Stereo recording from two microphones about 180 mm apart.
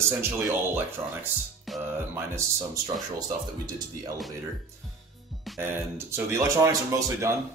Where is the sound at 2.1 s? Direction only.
15° right (ahead or behind).